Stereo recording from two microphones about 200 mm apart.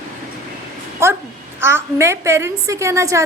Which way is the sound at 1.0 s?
15° right (ahead or behind).